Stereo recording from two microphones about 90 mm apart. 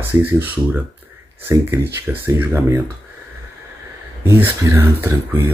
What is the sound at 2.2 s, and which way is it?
Speech, 25° right (ahead or behind).